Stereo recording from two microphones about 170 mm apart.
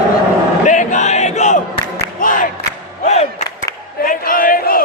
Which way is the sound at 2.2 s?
50° left (ahead or behind).